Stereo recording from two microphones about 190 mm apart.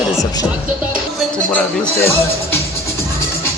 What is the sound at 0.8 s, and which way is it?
Music, 5° right (ahead or behind).